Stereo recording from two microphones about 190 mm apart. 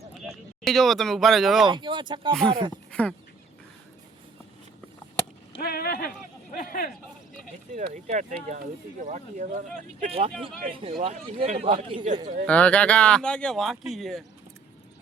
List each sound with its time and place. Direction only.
0.2 s speech: centre (ahead or behind)
1.6 s a man's voice: 25° right (ahead or behind)
2.3 s speech: 5° left (ahead or behind)
5.6 s speech: 55° left (ahead or behind)
7.7 s a man's voice: 40° right (ahead or behind)
12.5 s speech: 5° left (ahead or behind)